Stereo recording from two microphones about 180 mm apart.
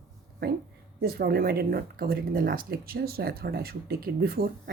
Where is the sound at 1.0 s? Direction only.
60° right (ahead or behind).